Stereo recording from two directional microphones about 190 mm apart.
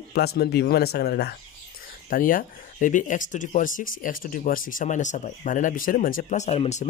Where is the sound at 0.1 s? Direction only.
55° left (ahead or behind).